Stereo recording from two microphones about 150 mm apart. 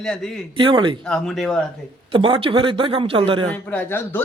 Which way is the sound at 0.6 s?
30° right (ahead or behind).